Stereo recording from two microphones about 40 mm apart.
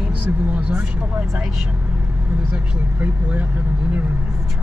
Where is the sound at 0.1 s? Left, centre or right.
Right.